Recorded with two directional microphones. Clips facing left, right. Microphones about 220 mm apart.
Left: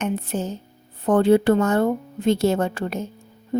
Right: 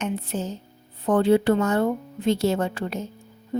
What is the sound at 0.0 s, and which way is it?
A woman's voice, 50° left (ahead or behind).